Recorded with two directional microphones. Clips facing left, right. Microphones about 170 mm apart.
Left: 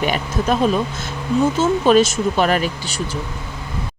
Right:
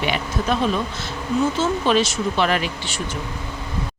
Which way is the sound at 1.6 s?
45° left (ahead or behind).